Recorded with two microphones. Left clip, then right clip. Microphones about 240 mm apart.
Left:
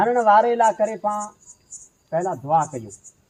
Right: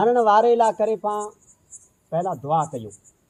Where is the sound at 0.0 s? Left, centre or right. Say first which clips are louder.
Left 1 dB; right.